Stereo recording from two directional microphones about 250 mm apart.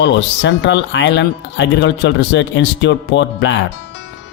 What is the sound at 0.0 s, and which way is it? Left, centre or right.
Speech, left.